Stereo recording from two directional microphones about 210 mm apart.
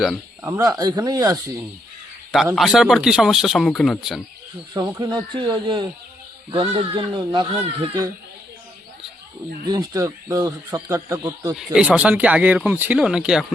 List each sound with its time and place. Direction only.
0.4 s speech: 15° right (ahead or behind)
2.6 s speech: centre (ahead or behind)
4.7 s speech: 20° right (ahead or behind)
9.6 s speech: 15° right (ahead or behind)
11.5 s speech: 5° right (ahead or behind)